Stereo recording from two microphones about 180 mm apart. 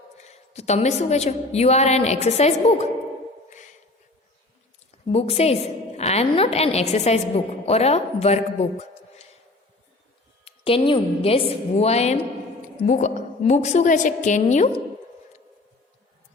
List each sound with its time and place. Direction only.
0.2 s a woman's voice: 40° left (ahead or behind)
4.9 s a woman's voice: 35° left (ahead or behind)
10.4 s a woman's voice: 30° left (ahead or behind)